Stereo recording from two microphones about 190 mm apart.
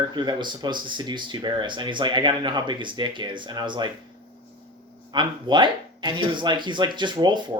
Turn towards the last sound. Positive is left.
turn(degrees=-25)  # may be behind; listen again after turning